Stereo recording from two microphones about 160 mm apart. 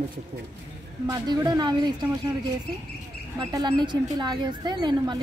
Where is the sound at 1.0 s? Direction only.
25° right (ahead or behind).